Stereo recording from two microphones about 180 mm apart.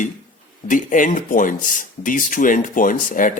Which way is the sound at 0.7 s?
45° left (ahead or behind).